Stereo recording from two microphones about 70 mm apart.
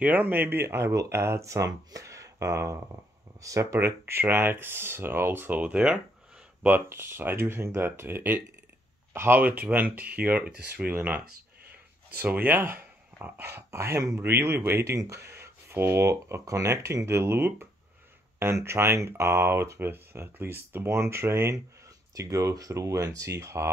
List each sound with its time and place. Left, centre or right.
0.0 s speech: right
4.1 s speech: right
5.6 s speech: centre
6.9 s speech: right
9.4 s speech: right
12.2 s speech: right
22.1 s speech: right